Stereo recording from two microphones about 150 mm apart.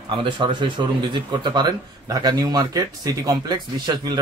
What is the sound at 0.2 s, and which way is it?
A man's voice, 30° right (ahead or behind).